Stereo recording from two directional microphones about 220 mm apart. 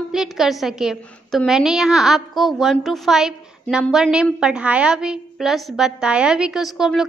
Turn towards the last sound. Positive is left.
turn(degrees=0)  # may be behind; listen again after turning